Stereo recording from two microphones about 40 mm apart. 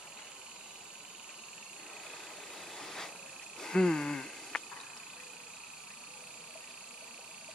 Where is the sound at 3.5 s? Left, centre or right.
Centre.